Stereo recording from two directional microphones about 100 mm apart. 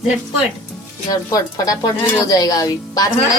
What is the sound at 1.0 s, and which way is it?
Speech, 40° left (ahead or behind).